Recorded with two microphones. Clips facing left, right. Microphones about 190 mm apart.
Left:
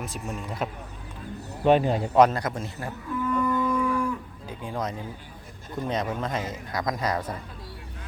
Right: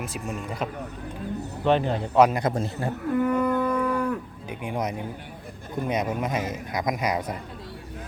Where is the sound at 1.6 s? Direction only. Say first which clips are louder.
Left 2 dB; 10° left (ahead or behind).